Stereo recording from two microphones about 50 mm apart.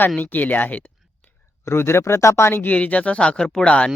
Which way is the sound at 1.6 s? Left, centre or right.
Left.